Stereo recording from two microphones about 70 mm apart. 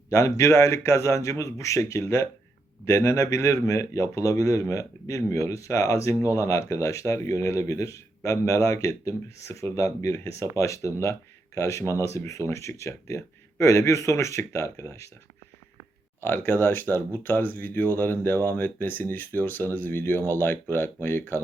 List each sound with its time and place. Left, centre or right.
0.1 s speech: left
16.2 s speech: left